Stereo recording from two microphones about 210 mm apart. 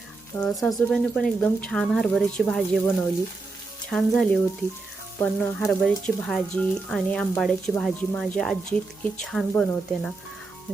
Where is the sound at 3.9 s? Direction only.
Centre (ahead or behind).